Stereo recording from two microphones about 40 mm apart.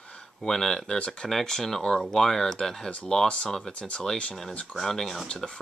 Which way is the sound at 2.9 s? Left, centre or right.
Left.